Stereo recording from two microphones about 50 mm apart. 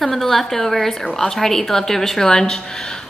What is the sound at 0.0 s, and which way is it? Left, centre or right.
A woman's voice, centre.